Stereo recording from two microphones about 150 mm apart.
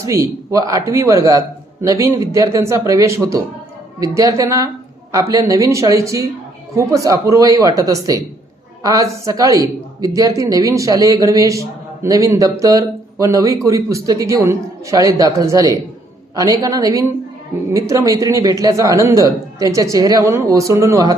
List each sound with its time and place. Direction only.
0.0 s a man's voice: 20° right (ahead or behind)